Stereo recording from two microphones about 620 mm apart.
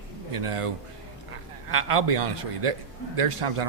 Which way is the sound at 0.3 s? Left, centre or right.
Right.